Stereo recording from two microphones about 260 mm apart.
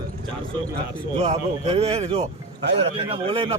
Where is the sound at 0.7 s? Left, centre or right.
Right.